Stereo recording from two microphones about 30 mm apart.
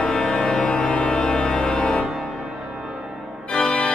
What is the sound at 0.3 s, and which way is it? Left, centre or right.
Music, centre.